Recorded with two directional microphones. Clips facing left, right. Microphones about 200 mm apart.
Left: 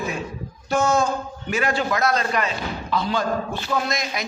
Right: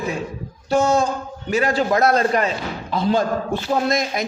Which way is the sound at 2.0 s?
55° right (ahead or behind).